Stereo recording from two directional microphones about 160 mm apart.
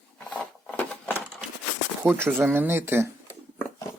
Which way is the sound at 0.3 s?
5° left (ahead or behind).